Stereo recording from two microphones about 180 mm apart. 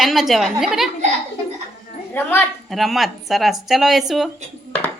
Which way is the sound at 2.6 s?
Centre (ahead or behind).